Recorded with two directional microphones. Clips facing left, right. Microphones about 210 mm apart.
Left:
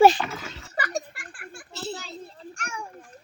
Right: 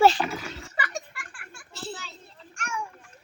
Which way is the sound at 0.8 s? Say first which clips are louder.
Left 5 dB; 40° left (ahead or behind).